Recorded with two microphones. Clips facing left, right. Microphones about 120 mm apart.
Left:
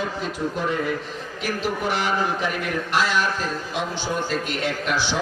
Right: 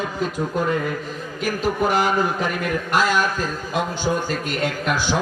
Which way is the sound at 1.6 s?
45° right (ahead or behind).